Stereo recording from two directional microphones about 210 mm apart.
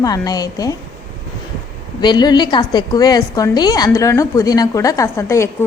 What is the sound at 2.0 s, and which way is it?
A woman's voice, 20° left (ahead or behind).